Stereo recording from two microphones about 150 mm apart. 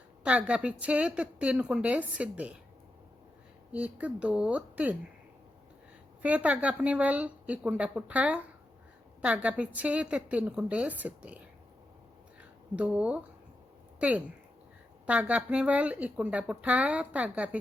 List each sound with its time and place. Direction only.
0.3 s speech: 10° right (ahead or behind)
3.7 s speech: 10° right (ahead or behind)
6.2 s speech: 10° right (ahead or behind)
12.7 s speech: 10° right (ahead or behind)